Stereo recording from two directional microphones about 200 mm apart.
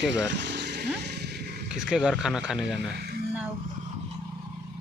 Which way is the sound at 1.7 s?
5° right (ahead or behind).